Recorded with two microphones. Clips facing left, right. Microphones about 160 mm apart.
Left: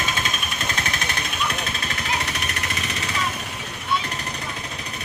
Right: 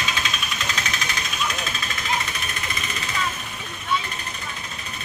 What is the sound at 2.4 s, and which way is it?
Jackhammer, 75° left (ahead or behind).